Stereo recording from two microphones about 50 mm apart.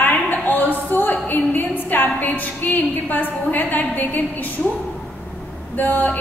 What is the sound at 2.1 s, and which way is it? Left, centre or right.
A woman's voice, left.